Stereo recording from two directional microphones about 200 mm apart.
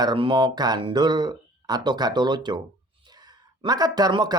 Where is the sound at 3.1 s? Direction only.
20° right (ahead or behind).